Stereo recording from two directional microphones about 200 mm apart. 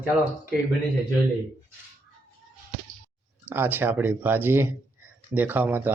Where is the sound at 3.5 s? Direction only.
10° right (ahead or behind).